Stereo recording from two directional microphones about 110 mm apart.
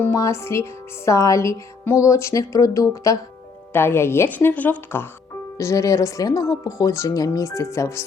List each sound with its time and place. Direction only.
0.0 s a woman's voice: 25° left (ahead or behind)
5.5 s a woman's voice: 30° left (ahead or behind)